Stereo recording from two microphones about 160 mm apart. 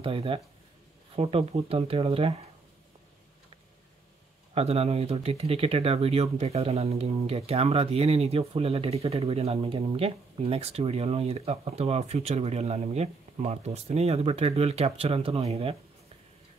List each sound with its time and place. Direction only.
0.0 s speech: 35° right (ahead or behind)
4.6 s speech: 40° right (ahead or behind)